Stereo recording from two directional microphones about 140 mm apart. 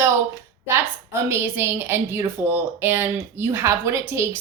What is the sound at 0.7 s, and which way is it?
A woman's voice, 15° right (ahead or behind).